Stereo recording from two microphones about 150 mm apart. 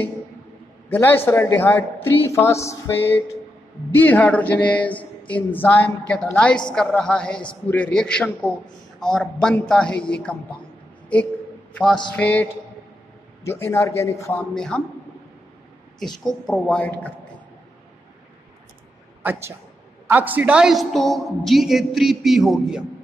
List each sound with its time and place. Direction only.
0.8 s a woman's voice: 15° left (ahead or behind)
13.5 s a woman's voice: 15° left (ahead or behind)
14.5 s a woman's voice: 5° left (ahead or behind)
16.0 s a woman's voice: centre (ahead or behind)
19.2 s a man's voice: 10° right (ahead or behind)